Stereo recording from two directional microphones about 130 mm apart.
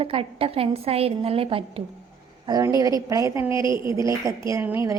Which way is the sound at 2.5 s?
30° right (ahead or behind).